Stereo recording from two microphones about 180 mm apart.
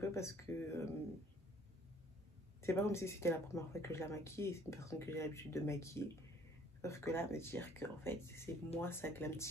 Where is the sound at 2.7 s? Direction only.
15° left (ahead or behind).